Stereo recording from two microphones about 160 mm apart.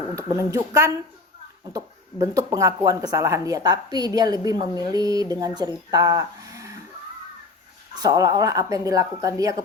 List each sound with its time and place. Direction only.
0.2 s speech: 20° right (ahead or behind)
7.9 s speech: 25° right (ahead or behind)